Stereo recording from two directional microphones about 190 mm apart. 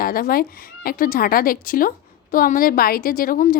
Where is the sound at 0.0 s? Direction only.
50° left (ahead or behind).